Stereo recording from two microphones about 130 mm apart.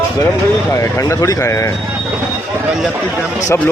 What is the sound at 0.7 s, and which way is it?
A man's voice, 25° left (ahead or behind).